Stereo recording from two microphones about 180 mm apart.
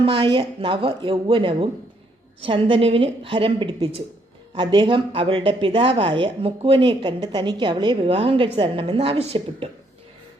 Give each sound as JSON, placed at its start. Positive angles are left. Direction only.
{"t": 0.0, "sound": "a woman's voice", "side_deg": -30}